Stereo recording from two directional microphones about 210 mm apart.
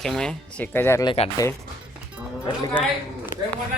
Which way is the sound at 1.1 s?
25° left (ahead or behind).